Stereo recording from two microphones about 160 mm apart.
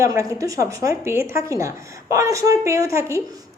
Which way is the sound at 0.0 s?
20° right (ahead or behind).